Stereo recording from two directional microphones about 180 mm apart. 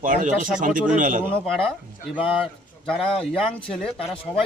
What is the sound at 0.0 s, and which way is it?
A man's voice, 50° right (ahead or behind).